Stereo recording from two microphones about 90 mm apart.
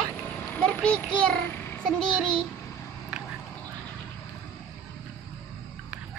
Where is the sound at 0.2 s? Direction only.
20° left (ahead or behind).